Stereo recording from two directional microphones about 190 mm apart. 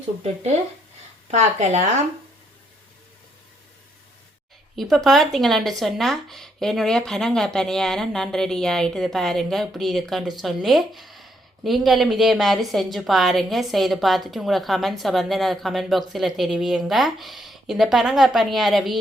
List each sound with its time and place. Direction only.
0.2 s speech: 35° right (ahead or behind)
4.8 s speech: centre (ahead or behind)